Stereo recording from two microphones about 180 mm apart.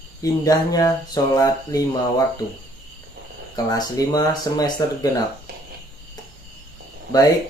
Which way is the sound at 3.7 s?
20° left (ahead or behind).